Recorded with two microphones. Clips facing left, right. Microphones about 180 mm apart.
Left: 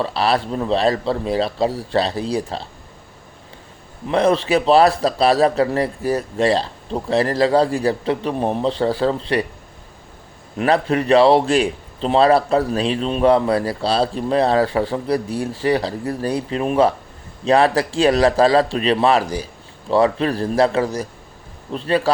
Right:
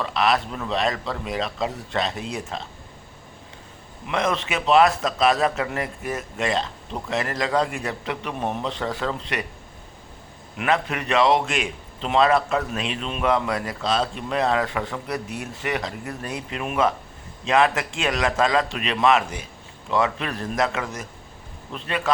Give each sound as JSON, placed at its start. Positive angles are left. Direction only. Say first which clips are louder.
{"t": 0.0, "sound": "a man's voice", "louder": "left 3 dB", "side_deg": 30}
{"t": 4.0, "sound": "a man's voice", "louder": "left 8 dB", "side_deg": 35}
{"t": 10.6, "sound": "a man's voice", "louder": "left 7 dB", "side_deg": 35}